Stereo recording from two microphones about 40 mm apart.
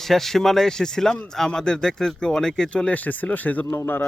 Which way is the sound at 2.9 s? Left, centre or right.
Left.